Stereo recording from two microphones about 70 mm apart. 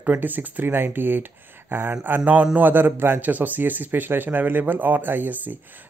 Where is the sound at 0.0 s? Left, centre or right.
Right.